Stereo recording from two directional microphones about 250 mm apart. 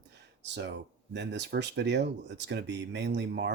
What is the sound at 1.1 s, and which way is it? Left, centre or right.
Speech, right.